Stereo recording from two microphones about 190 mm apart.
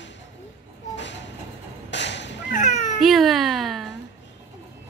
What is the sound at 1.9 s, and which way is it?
Whip, 65° left (ahead or behind).